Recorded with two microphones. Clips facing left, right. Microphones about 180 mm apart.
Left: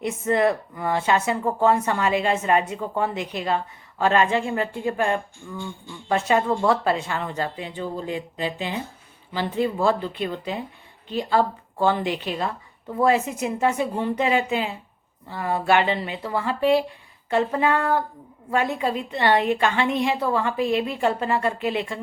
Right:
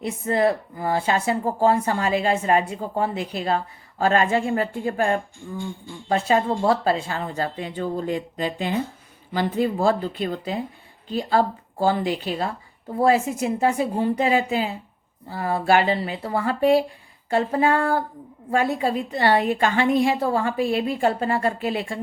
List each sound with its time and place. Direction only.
0.0 s speech: 35° right (ahead or behind)